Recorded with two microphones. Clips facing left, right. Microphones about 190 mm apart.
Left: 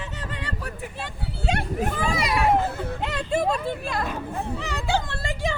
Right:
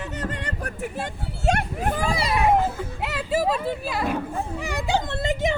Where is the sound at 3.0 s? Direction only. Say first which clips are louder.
Right 1 dB; 5° right (ahead or behind); by 5.5 s 20° right (ahead or behind).